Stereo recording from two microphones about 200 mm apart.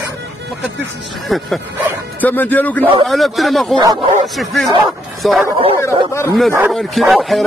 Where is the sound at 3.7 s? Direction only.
25° right (ahead or behind).